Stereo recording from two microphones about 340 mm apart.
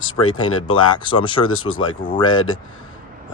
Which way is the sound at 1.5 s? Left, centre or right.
Left.